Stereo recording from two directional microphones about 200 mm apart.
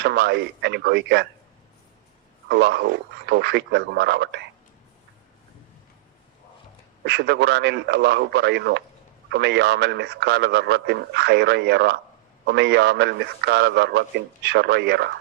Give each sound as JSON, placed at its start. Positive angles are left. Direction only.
{"t": 0.0, "sound": "a man's voice", "side_deg": -55}
{"t": 2.5, "sound": "a man's voice", "side_deg": -55}
{"t": 7.0, "sound": "a man's voice", "side_deg": -60}